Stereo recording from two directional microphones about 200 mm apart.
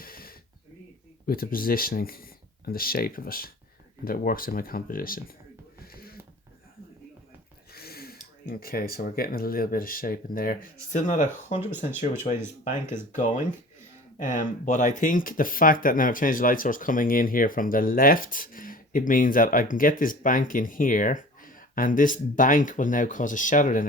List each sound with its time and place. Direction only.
0.0 s snort: 45° left (ahead or behind)
1.3 s speech: 45° left (ahead or behind)
5.8 s a sound: 50° left (ahead or behind)
7.7 s speech: 50° left (ahead or behind)